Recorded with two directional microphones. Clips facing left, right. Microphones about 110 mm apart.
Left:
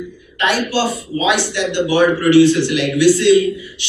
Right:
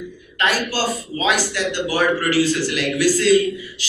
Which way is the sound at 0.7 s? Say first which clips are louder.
Left 4 dB; 40° right (ahead or behind).